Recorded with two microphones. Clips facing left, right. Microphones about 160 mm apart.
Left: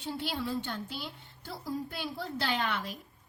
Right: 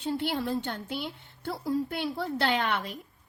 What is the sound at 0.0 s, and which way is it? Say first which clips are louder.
A woman's voice: right 5 dB; 60° right (ahead or behind).